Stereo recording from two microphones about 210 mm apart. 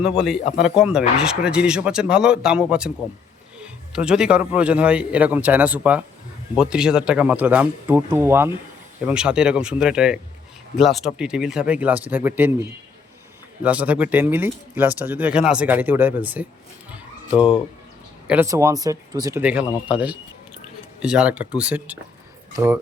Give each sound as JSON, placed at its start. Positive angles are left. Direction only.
{"t": 0.6, "sound": "a man's voice", "side_deg": -5}
{"t": 16.9, "sound": "a sound", "side_deg": -5}
{"t": 18.3, "sound": "speech", "side_deg": -10}
{"t": 19.4, "sound": "a man's voice", "side_deg": -5}